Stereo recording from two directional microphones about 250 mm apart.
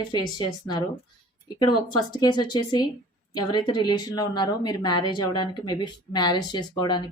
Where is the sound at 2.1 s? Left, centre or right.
Centre.